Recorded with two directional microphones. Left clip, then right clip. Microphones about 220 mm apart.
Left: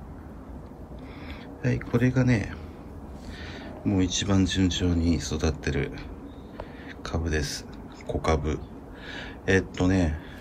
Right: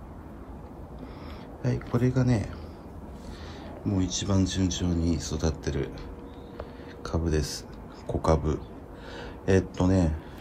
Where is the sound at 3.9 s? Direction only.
10° right (ahead or behind).